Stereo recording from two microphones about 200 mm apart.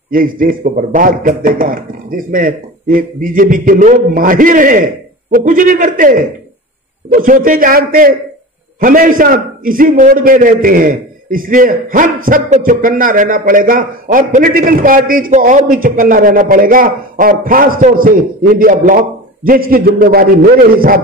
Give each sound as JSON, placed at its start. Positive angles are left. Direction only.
{"t": 0.1, "sound": "a man's voice", "side_deg": -45}